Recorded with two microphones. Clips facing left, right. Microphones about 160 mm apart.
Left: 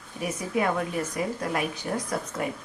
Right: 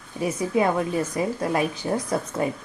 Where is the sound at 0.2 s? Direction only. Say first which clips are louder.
Right 5 dB; 25° right (ahead or behind).